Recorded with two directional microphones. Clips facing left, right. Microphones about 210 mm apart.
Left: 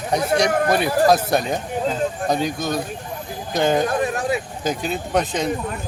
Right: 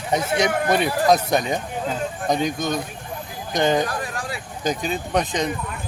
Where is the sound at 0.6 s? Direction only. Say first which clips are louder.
Left 1 dB; 5° left (ahead or behind).